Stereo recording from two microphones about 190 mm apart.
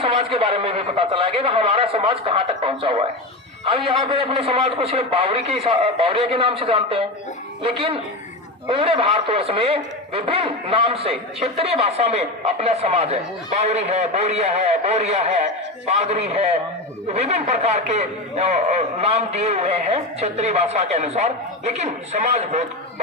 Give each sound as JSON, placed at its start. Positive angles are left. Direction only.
{"t": 0.0, "sound": "a man's voice", "side_deg": -30}